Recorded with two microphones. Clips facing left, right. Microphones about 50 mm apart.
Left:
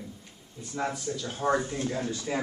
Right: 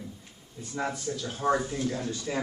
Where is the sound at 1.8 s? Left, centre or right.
Centre.